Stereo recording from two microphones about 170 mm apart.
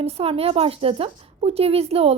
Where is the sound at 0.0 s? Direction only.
35° right (ahead or behind).